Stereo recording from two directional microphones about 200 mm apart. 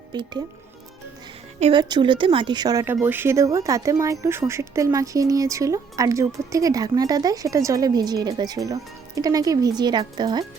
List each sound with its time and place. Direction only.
0.1 s speech: 20° right (ahead or behind)
1.5 s a woman's voice: 35° right (ahead or behind)
1.8 s speech: 20° right (ahead or behind)